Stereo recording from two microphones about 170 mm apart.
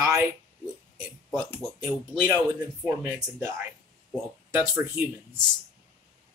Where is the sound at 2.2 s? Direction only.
20° right (ahead or behind).